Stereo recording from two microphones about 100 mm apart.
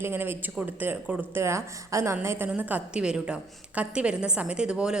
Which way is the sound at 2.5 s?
15° right (ahead or behind).